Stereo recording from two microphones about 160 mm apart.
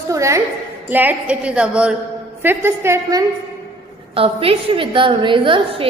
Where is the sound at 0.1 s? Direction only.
20° right (ahead or behind).